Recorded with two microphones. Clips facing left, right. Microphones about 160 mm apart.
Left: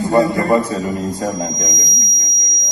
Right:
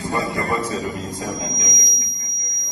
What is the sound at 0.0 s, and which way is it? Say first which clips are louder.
A man's voice: left 9 dB; 40° left (ahead or behind).